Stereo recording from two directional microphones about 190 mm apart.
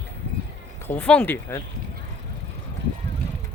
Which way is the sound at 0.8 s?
10° left (ahead or behind).